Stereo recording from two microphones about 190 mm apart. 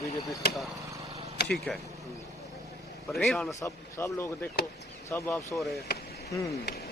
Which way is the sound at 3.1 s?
Centre (ahead or behind).